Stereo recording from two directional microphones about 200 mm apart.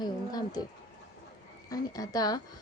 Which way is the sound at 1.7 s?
20° left (ahead or behind).